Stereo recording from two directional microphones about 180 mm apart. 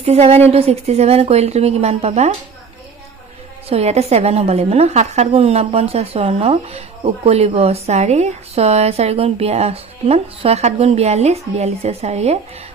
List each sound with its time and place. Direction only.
0.0 s speech: 35° right (ahead or behind)
3.6 s speech: 35° right (ahead or behind)